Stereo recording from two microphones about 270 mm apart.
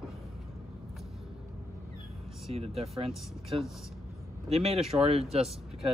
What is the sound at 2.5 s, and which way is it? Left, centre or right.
Speech, right.